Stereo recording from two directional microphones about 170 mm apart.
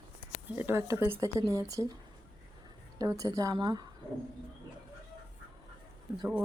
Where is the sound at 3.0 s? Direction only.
20° right (ahead or behind).